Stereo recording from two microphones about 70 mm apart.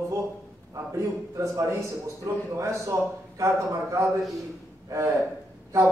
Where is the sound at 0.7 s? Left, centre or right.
Right.